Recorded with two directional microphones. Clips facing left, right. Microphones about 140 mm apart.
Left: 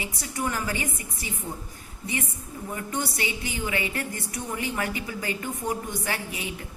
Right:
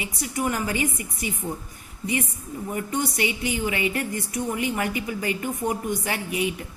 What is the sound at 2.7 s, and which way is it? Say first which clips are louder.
A woman's voice: right 4 dB; 20° right (ahead or behind).